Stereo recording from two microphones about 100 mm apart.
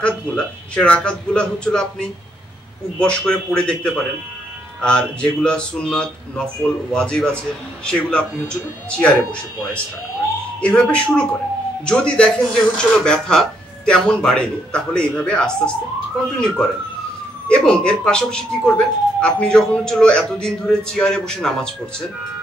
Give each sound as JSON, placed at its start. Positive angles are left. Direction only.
{"t": 0.0, "sound": "speech", "side_deg": 10}
{"t": 10.6, "sound": "speech", "side_deg": 10}